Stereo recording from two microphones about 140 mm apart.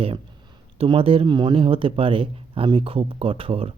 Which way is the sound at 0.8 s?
40° right (ahead or behind).